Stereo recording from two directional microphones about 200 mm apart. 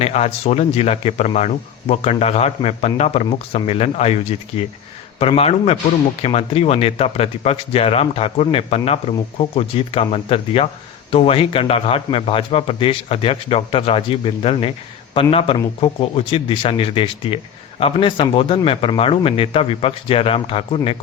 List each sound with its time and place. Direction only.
0.0 s a man's voice: 30° left (ahead or behind)